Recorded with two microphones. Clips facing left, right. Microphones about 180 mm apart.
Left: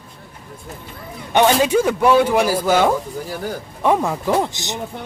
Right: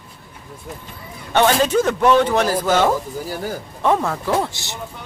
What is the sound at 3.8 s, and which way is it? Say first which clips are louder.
A man's voice: left 1 dB; 10° left (ahead or behind).